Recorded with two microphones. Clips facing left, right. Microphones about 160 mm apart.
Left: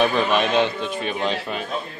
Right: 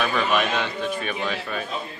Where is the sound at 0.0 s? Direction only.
30° left (ahead or behind).